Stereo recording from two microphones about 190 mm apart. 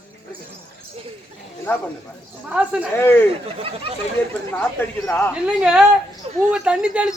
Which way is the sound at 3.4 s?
30° right (ahead or behind).